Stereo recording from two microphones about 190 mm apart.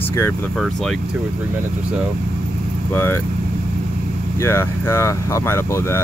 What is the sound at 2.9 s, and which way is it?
Speech, 10° left (ahead or behind).